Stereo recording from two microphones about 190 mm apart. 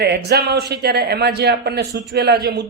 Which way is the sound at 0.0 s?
60° right (ahead or behind).